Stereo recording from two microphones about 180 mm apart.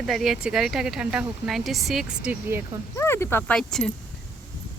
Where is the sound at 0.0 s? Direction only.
Centre (ahead or behind).